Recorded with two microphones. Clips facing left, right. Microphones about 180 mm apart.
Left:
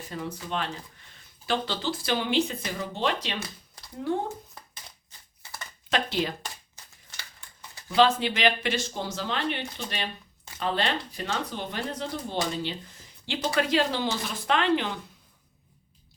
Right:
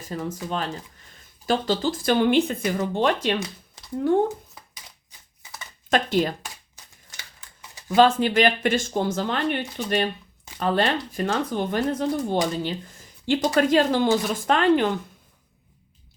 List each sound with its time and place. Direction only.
0.1 s speech: 40° right (ahead or behind)
5.9 s speech: 50° right (ahead or behind)
7.9 s speech: 45° right (ahead or behind)